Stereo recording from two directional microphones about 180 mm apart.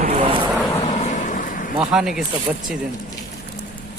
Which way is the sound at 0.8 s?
40° left (ahead or behind).